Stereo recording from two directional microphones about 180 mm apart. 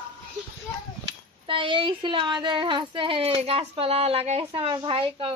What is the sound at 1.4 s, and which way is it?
A woman's voice, 30° right (ahead or behind).